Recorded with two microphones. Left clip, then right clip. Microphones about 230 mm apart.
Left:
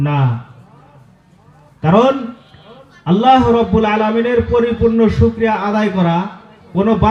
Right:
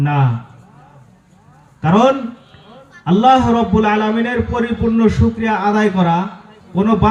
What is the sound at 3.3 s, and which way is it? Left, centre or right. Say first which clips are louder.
A man's voice: left 2 dB; left.